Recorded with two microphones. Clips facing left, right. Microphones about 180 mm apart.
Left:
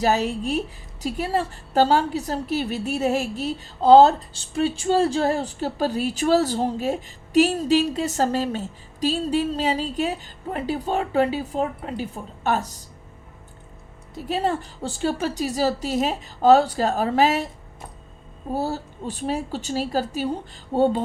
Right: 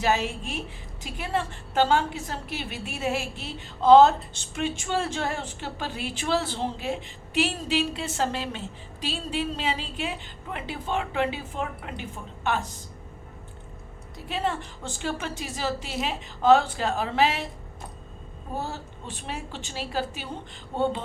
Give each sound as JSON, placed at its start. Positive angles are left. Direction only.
{"t": 0.0, "sound": "a woman's voice", "side_deg": 40}
{"t": 14.3, "sound": "a woman's voice", "side_deg": 40}
{"t": 18.5, "sound": "a woman's voice", "side_deg": 40}